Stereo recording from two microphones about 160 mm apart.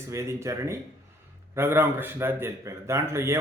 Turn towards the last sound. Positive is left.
turn(degrees=-15)  # may be behind; listen again after turning